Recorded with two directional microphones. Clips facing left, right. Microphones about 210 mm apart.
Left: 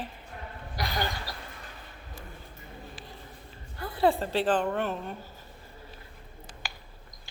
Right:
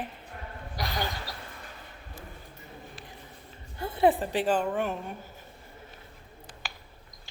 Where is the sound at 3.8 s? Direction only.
20° right (ahead or behind).